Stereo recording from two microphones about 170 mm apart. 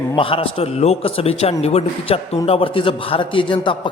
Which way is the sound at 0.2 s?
30° left (ahead or behind).